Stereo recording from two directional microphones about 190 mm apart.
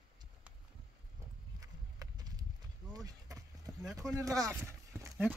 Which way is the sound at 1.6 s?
20° right (ahead or behind).